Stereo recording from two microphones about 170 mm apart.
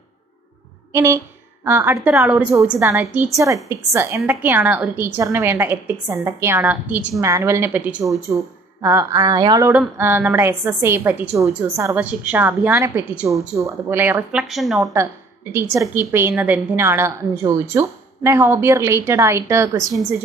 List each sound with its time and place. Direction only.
0.9 s a woman's voice: 15° right (ahead or behind)
8.8 s speech: 20° right (ahead or behind)
9.7 s a woman's voice: 10° right (ahead or behind)
15.5 s a woman's voice: 15° right (ahead or behind)